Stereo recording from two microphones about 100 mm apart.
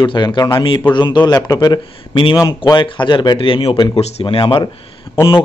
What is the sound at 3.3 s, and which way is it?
A man's voice, 65° left (ahead or behind).